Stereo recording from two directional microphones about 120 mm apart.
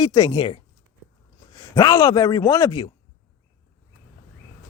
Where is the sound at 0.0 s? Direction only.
40° left (ahead or behind).